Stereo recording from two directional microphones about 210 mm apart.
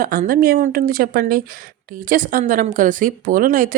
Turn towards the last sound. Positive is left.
turn(degrees=-40)  # may be behind; listen again after turning